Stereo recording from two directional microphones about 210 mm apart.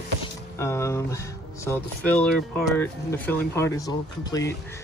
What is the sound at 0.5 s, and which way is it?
Speech, 15° left (ahead or behind).